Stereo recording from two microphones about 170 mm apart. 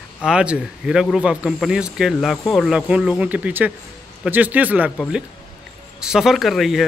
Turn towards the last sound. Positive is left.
turn(degrees=0)  # may be behind; listen again after turning